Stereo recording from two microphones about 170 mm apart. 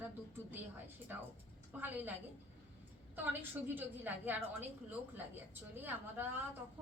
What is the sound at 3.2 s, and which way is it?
A woman's voice, 10° right (ahead or behind).